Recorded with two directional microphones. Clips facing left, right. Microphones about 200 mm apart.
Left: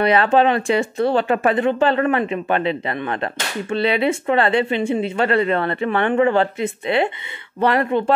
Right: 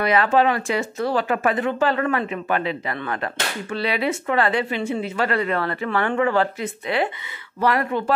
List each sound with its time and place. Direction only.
0.0 s speech: 30° left (ahead or behind)